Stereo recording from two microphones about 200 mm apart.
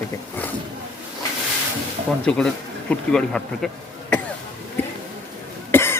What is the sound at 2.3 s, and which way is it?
Speech, 5° left (ahead or behind).